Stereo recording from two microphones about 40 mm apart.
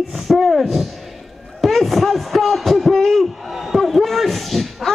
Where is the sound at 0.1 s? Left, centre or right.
Centre.